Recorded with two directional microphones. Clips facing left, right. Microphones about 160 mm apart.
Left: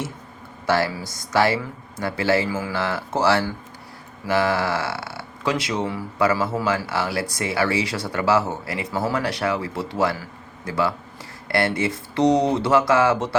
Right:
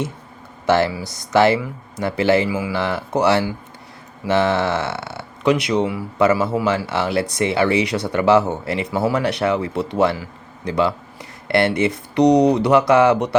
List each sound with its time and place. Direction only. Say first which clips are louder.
0.6 s speech: right 4 dB; 20° right (ahead or behind)